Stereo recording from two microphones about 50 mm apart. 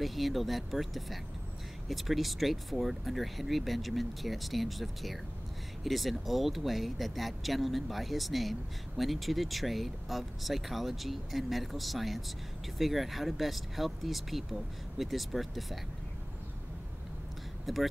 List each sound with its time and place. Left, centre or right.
0.0 s speech: centre
17.7 s speech: centre